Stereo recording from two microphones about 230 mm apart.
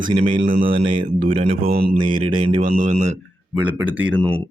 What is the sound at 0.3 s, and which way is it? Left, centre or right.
Mantra, right.